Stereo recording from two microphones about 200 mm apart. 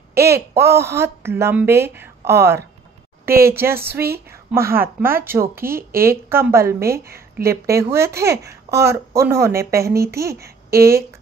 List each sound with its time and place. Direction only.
0.3 s speech: 15° right (ahead or behind)
10.4 s speech: 50° right (ahead or behind)